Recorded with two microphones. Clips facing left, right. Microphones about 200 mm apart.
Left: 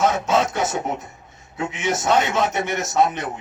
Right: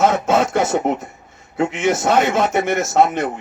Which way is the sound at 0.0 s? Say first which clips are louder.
Right 3 dB; 55° right (ahead or behind).